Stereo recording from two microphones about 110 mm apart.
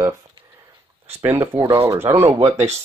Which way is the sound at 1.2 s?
20° right (ahead or behind).